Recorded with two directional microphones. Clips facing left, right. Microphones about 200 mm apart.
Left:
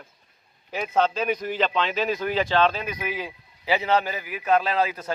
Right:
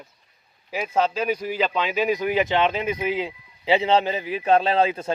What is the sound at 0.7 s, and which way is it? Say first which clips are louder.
Speech: even; 5° right (ahead or behind).